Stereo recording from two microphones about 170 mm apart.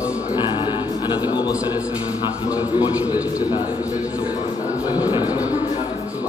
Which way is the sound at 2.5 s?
10° right (ahead or behind).